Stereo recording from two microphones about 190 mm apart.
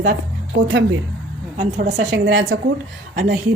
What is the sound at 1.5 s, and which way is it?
Speech, 40° right (ahead or behind).